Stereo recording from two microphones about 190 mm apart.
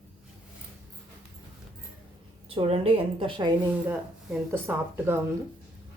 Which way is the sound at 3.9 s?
10° right (ahead or behind).